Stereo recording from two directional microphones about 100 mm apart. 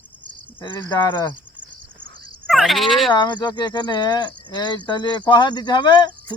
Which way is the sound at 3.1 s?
45° left (ahead or behind).